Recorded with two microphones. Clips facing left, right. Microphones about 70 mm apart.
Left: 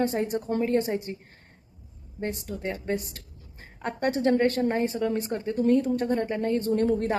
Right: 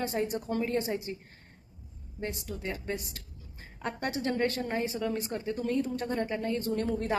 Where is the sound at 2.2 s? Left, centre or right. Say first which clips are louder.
Left 5 dB; left.